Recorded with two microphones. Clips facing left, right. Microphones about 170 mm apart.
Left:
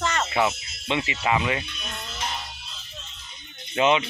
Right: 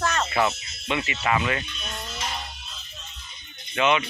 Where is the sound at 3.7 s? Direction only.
25° left (ahead or behind).